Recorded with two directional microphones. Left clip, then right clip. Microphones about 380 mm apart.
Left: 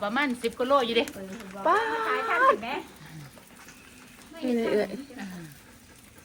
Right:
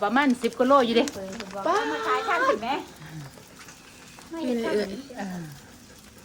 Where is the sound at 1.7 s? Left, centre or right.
Centre.